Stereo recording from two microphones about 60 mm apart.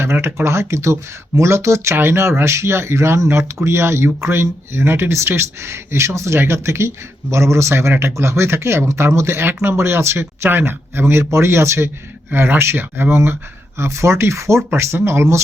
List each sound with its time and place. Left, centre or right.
0.0 s speech: right